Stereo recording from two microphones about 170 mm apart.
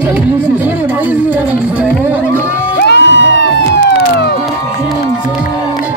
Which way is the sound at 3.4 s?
85° left.